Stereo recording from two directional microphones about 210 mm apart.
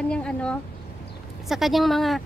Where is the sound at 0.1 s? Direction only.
5° left (ahead or behind).